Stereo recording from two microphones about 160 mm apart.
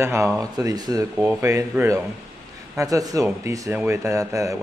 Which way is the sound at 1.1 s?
10° right (ahead or behind).